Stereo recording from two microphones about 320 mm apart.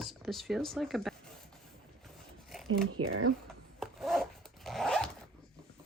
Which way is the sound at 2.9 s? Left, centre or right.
Right.